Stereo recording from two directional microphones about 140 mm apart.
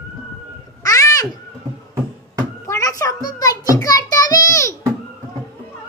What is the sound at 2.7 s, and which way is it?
Music, 20° left (ahead or behind).